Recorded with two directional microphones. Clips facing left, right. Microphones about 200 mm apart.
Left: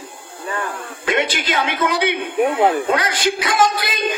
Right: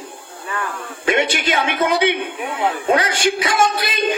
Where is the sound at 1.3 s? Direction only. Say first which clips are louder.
Right 1 dB; 50° right (ahead or behind).